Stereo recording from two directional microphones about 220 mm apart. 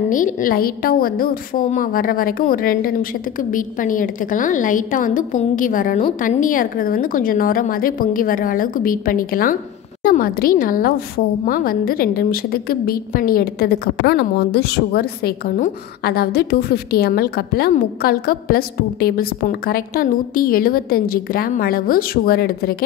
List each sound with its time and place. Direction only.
0.1 s a woman's voice: 40° left (ahead or behind)